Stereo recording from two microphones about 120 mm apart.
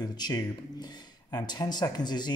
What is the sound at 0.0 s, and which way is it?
Speech, 35° left (ahead or behind).